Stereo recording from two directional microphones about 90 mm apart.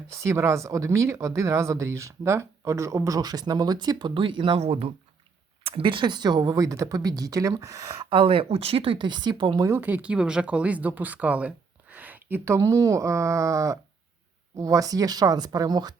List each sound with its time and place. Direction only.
0.1 s speech: 30° right (ahead or behind); by 4.9 s 90° right
5.6 s speech: 80° right; by 7.9 s 40° right (ahead or behind)
8.1 s speech: 85° right; by 9.6 s 55° right (ahead or behind)
9.8 s speech: 15° right (ahead or behind)
12.5 s speech: 35° right (ahead or behind); by 16.0 s 50° right (ahead or behind)